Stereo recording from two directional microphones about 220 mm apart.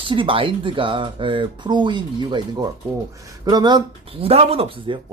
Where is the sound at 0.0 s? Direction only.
25° right (ahead or behind).